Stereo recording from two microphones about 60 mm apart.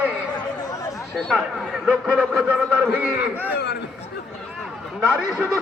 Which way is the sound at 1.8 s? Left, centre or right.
Right.